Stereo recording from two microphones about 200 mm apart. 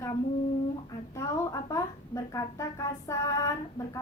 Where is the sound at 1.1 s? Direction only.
15° left (ahead or behind).